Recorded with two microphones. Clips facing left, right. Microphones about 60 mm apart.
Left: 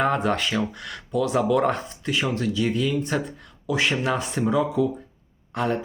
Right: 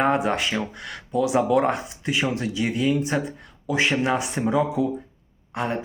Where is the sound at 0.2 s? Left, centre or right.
Centre.